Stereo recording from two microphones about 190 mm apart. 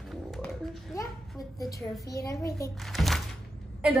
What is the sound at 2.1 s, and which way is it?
Speech, 15° left (ahead or behind).